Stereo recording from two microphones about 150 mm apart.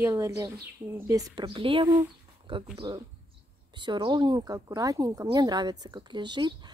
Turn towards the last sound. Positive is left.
turn(degrees=-30)  # may be behind; listen again after turning